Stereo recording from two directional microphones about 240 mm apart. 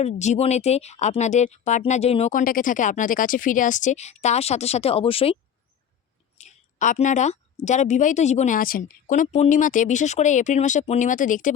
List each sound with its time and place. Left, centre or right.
0.0 s speech: left
6.3 s a sound: left
7.6 s a woman's voice: left